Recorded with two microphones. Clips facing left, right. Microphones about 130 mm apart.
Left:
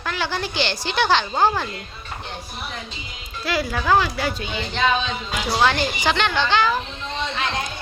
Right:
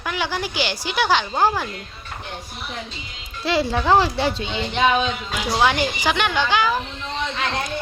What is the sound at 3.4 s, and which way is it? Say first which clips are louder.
A woman's voice: right 3 dB; 25° right (ahead or behind).